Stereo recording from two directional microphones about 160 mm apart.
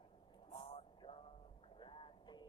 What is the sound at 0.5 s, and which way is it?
Vehicle, 30° left (ahead or behind).